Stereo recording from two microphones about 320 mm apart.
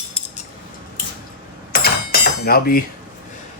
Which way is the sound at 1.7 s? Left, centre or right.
Left.